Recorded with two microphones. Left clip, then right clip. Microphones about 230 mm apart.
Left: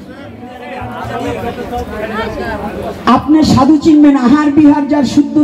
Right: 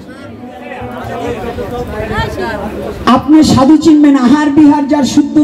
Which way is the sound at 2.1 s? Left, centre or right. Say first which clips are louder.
Right 3 dB; right.